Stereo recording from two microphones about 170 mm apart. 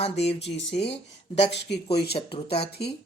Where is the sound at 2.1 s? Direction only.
35° left (ahead or behind).